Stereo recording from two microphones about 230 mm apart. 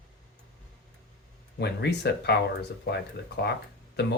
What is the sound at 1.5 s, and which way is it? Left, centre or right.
Speech, left.